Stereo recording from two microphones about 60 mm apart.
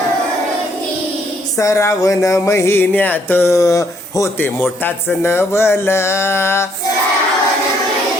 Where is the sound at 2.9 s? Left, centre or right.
Left.